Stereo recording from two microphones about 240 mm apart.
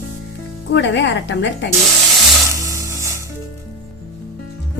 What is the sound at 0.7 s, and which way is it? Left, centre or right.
A woman's voice, left.